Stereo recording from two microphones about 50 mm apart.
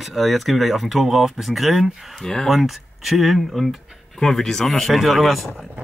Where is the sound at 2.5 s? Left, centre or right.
Centre.